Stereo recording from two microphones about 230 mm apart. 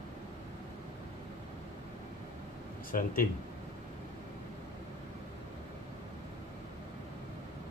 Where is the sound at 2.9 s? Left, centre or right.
Left.